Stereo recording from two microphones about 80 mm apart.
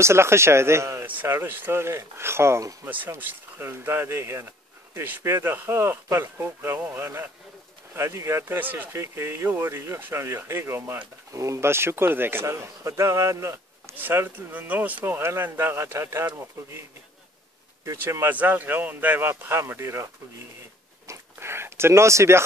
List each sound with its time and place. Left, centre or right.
0.0 s speech: right
1.0 s speech: right
2.8 s speech: right
17.8 s speech: right
21.1 s speech: right